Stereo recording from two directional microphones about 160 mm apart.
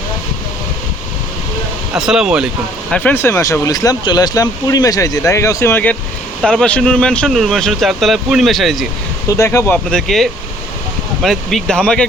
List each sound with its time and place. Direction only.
2.0 s speech: 5° right (ahead or behind)
2.9 s speech: 10° left (ahead or behind)
9.3 s speech: 20° left (ahead or behind)
9.9 s speech: centre (ahead or behind)